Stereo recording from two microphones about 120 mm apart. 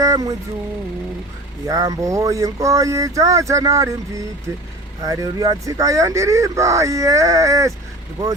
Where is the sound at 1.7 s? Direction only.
30° right (ahead or behind).